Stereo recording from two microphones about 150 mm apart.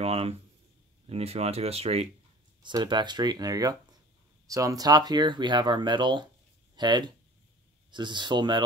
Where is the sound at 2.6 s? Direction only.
30° right (ahead or behind).